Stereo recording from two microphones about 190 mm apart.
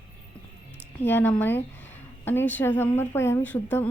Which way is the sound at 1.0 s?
10° left (ahead or behind).